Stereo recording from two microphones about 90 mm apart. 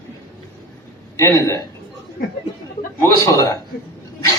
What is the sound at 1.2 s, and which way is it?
Speech, 35° left (ahead or behind).